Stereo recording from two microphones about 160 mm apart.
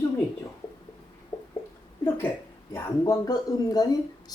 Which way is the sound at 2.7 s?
25° left (ahead or behind).